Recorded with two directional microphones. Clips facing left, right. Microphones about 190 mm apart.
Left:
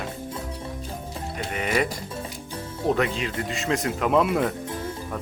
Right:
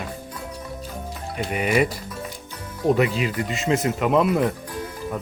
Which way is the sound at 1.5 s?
10° right (ahead or behind).